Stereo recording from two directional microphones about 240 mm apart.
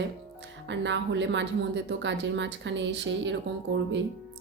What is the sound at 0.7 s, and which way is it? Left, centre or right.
A woman's voice, right.